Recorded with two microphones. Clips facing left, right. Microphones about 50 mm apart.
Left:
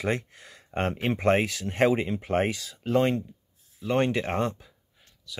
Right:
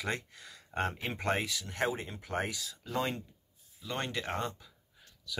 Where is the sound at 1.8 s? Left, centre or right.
Left.